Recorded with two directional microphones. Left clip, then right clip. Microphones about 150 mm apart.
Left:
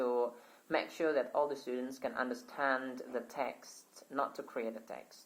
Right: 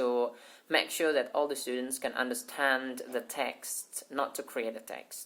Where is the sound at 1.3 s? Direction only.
45° right (ahead or behind).